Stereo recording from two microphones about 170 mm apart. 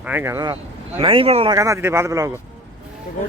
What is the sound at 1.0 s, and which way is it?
Speech, 30° right (ahead or behind).